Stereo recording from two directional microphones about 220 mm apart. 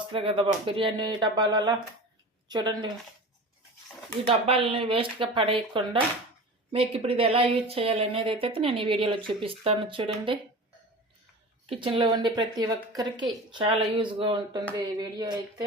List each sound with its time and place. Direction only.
0.1 s speech: 25° right (ahead or behind)
4.3 s speech: 25° right (ahead or behind)
11.7 s speech: 25° right (ahead or behind)